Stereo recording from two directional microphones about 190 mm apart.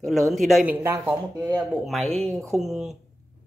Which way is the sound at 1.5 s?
Centre (ahead or behind).